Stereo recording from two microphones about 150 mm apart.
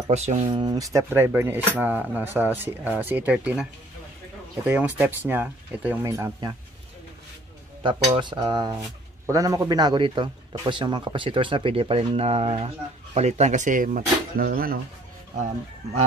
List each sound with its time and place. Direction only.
0.1 s speech: 50° right (ahead or behind)
0.5 s speech: 30° right (ahead or behind); by 3.6 s 10° right (ahead or behind)
4.6 s speech: 10° right (ahead or behind)
6.0 s speech: 20° right (ahead or behind)
7.8 s speech: 35° right (ahead or behind); by 14.8 s 75° right (ahead or behind)